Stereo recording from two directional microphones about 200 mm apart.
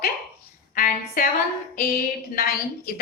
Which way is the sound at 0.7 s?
45° left (ahead or behind).